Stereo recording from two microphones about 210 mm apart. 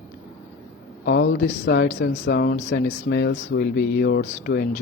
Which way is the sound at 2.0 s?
55° left (ahead or behind).